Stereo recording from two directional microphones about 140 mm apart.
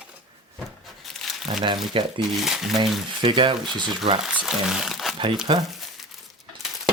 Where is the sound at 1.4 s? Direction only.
35° right (ahead or behind).